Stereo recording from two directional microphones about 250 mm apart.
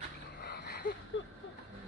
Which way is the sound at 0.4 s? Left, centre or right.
Left.